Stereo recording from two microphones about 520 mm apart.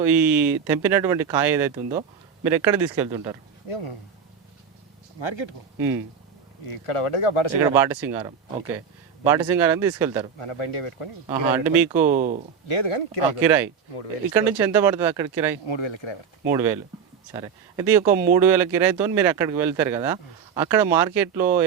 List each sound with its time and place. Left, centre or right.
0.0 s speech: centre
3.7 s speech: left
6.7 s speech: left
7.7 s speech: centre
9.2 s speech: centre
10.3 s speech: left
11.3 s speech: centre
12.1 s speech: centre
12.6 s speech: left
13.4 s speech: centre
15.6 s speech: left
16.5 s speech: centre